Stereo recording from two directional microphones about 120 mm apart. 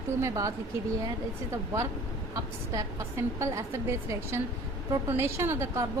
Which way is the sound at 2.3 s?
25° right (ahead or behind).